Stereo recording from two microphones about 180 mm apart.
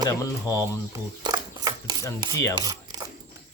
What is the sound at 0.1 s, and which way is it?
Speech, 20° left (ahead or behind).